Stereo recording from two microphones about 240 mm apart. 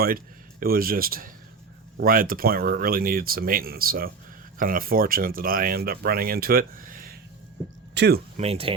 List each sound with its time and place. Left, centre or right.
0.6 s speech: right
8.4 s speech: right